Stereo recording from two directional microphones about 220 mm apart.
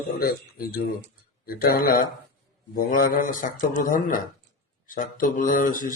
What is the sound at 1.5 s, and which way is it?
Speech, 40° left (ahead or behind).